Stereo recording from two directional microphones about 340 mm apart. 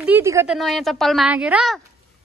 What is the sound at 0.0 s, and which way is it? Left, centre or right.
A woman's voice, centre.